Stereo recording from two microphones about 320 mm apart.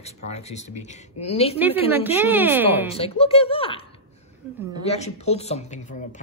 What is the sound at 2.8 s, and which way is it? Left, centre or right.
Speech, centre.